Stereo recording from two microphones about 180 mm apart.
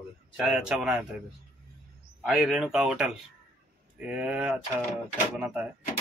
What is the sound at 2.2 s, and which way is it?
Speech, centre (ahead or behind).